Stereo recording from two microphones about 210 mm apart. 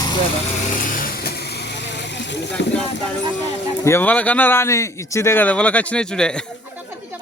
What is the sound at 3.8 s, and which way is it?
A man's voice, 10° left (ahead or behind).